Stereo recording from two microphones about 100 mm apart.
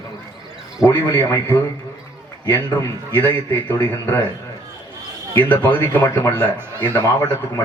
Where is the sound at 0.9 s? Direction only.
25° left (ahead or behind).